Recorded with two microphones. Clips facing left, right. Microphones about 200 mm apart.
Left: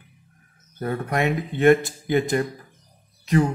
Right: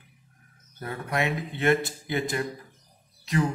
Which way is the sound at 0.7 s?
50° left (ahead or behind).